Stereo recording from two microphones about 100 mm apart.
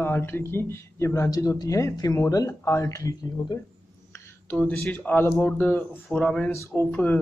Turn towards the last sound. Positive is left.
turn(degrees=20)  # may be behind; listen again after turning